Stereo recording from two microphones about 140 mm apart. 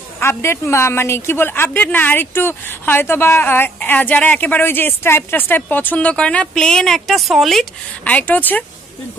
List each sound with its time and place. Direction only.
0.2 s a woman's voice: 20° left (ahead or behind); by 8.1 s centre (ahead or behind)
8.1 s a woman's voice: 10° left (ahead or behind)